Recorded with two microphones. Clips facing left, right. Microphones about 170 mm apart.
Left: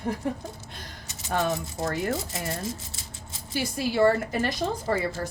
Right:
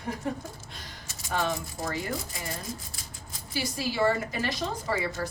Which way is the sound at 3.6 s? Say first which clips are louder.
Left 5 dB; 50° left (ahead or behind).